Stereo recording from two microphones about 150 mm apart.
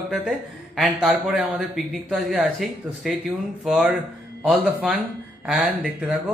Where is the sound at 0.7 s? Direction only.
Centre (ahead or behind).